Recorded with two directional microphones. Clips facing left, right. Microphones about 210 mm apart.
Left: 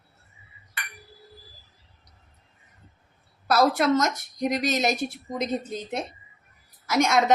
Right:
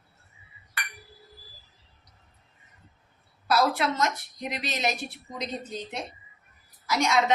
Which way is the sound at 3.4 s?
45° left (ahead or behind).